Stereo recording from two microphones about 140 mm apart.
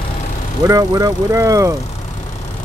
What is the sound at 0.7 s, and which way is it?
Speech, 25° right (ahead or behind).